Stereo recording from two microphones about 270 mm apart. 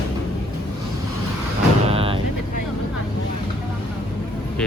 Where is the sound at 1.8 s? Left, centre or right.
Right.